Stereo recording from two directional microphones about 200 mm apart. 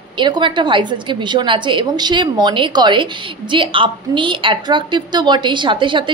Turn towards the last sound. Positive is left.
turn(degrees=-25)  # may be behind; listen again after turning